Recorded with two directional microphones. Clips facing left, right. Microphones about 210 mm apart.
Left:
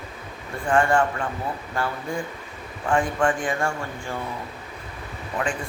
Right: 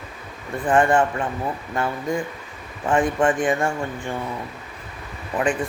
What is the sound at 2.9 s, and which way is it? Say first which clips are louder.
Speech: right 3 dB; 20° right (ahead or behind).